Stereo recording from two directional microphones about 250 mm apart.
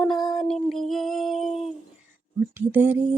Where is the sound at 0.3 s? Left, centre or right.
Centre.